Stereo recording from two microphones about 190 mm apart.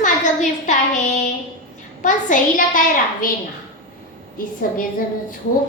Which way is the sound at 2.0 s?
40° left (ahead or behind).